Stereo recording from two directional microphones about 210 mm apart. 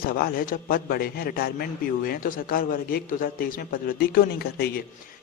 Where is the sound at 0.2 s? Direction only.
45° left (ahead or behind).